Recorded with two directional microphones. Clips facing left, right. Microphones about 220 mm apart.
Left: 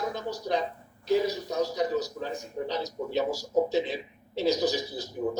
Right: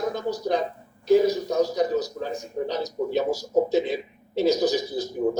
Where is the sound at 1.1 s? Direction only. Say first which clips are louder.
Right 7 dB; 45° right (ahead or behind).